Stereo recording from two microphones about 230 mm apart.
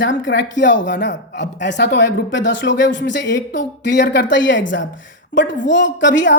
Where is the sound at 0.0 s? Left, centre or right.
Left.